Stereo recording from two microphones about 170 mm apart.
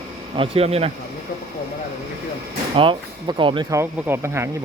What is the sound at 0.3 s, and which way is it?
Speech, 35° right (ahead or behind).